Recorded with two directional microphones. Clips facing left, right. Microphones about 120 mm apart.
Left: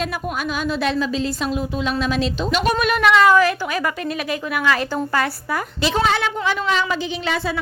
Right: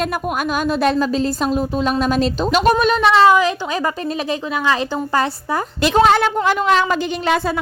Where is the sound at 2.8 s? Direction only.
25° right (ahead or behind).